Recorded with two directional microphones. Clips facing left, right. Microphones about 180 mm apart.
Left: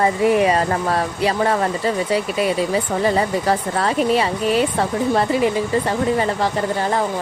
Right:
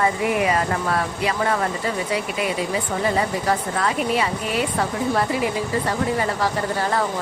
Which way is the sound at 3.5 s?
30° left (ahead or behind).